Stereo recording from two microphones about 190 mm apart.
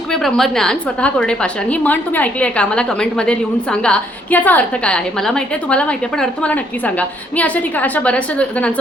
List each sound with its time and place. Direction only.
0.1 s a woman's voice: centre (ahead or behind)